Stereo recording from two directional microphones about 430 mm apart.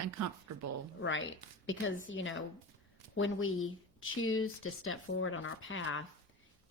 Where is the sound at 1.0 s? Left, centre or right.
Left.